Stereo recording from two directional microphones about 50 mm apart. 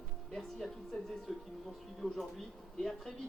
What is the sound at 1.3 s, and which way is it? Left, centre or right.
Speech, centre.